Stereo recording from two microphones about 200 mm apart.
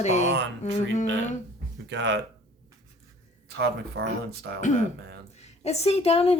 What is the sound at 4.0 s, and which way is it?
Speech, 55° right (ahead or behind).